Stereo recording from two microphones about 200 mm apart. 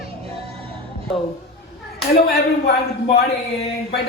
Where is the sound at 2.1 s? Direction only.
50° left (ahead or behind).